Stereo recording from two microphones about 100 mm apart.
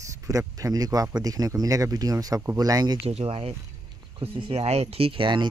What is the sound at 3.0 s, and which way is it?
Speech, 80° right.